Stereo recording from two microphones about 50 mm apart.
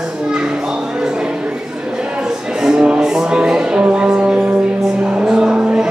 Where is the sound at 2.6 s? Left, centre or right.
Centre.